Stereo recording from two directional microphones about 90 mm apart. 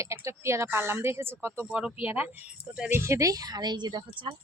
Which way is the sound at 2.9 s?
35° right (ahead or behind).